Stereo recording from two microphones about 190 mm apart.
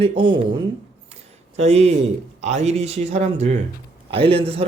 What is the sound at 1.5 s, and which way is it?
Speech, 35° right (ahead or behind).